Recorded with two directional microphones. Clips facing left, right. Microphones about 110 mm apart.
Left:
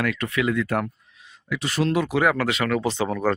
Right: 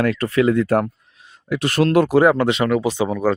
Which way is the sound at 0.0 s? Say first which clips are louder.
Right 7 dB; 35° right (ahead or behind).